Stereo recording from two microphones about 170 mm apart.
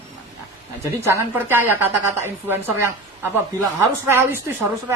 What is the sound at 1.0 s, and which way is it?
A woman's voice, 15° right (ahead or behind).